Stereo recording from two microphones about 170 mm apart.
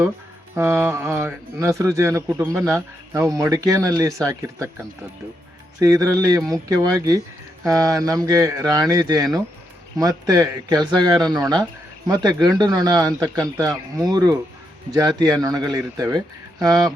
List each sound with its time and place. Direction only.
0.5 s speech: 15° right (ahead or behind)
5.8 s speech: 20° right (ahead or behind)